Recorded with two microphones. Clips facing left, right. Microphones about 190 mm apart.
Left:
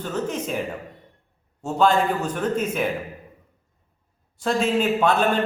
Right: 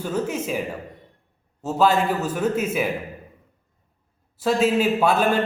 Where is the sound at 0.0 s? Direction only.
10° right (ahead or behind).